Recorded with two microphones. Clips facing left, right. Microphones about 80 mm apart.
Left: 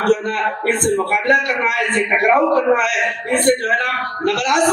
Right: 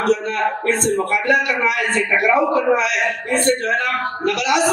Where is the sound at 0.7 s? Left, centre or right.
Left.